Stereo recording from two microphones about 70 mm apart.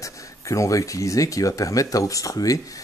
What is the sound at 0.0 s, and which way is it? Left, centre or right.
Speech, left.